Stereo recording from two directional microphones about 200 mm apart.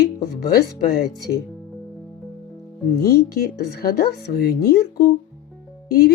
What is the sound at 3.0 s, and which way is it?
Speech, 50° left (ahead or behind).